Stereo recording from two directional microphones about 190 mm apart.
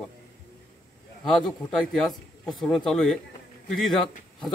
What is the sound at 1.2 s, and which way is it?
A man's voice, centre (ahead or behind).